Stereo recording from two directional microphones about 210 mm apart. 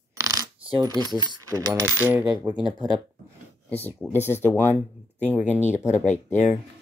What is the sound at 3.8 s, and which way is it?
Speech, centre (ahead or behind).